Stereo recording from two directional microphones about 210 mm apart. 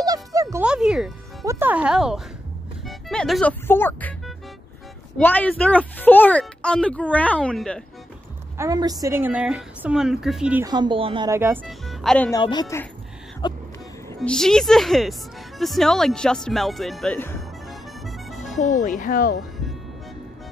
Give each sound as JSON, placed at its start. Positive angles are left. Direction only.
{"t": 0.0, "sound": "music", "side_deg": -15}
{"t": 1.4, "sound": "a woman's voice", "side_deg": -10}
{"t": 5.1, "sound": "a woman's voice", "side_deg": 10}
{"t": 8.5, "sound": "a woman's voice", "side_deg": -15}
{"t": 10.6, "sound": "speech", "side_deg": -20}
{"t": 11.2, "sound": "a woman's voice", "side_deg": -10}
{"t": 11.8, "sound": "speech", "side_deg": 0}
{"t": 12.3, "sound": "speech", "side_deg": 20}
{"t": 13.4, "sound": "vehicle", "side_deg": 20}
{"t": 14.0, "sound": "a woman's voice", "side_deg": 5}
{"t": 17.6, "sound": "accordion", "side_deg": 0}
{"t": 18.6, "sound": "speech", "side_deg": 40}